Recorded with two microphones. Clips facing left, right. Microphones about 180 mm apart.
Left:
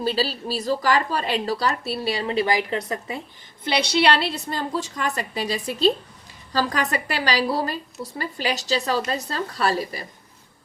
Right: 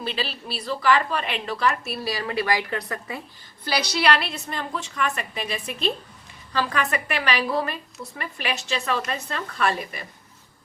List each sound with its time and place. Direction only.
0.0 s speech: 35° left (ahead or behind)